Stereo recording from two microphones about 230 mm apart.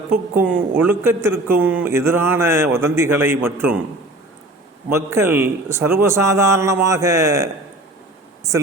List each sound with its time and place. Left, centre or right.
0.3 s a man's voice: centre
4.9 s a man's voice: centre